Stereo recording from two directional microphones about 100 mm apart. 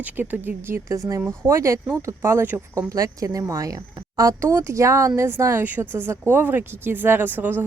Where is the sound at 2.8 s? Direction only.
35° right (ahead or behind).